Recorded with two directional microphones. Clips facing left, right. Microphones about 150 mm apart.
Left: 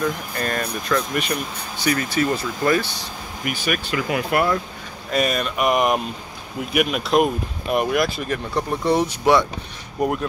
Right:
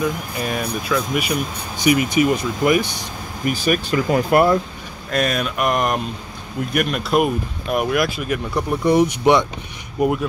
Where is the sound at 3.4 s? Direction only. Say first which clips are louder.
Right 5 dB; 35° right (ahead or behind).